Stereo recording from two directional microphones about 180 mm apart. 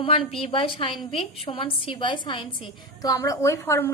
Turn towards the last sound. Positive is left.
turn(degrees=15)  # may be behind; listen again after turning